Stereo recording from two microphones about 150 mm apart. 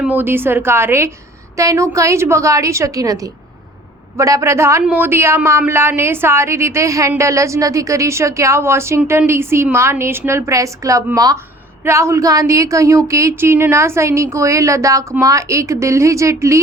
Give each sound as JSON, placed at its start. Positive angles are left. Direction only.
{"t": 0.0, "sound": "a man's voice", "side_deg": -10}